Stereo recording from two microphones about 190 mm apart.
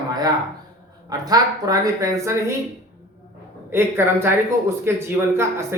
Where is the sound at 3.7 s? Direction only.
10° right (ahead or behind).